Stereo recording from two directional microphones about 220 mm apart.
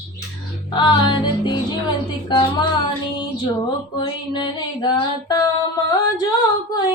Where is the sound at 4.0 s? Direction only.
20° left (ahead or behind).